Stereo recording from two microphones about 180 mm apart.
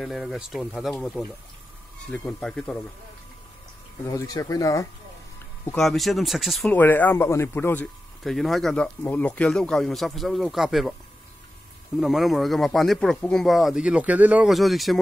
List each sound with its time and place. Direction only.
0.0 s speech: centre (ahead or behind)
4.0 s speech: 20° left (ahead or behind)
5.7 s speech: centre (ahead or behind)
6.7 s speech: 10° left (ahead or behind)
12.0 s speech: centre (ahead or behind)